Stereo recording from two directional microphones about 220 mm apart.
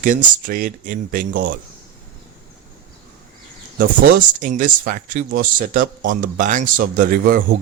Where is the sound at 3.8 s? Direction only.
40° right (ahead or behind).